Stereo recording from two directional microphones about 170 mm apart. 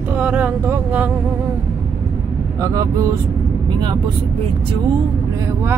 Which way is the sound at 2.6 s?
20° right (ahead or behind).